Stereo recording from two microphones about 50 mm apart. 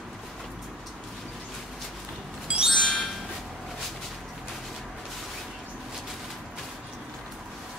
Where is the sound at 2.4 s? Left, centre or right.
Right.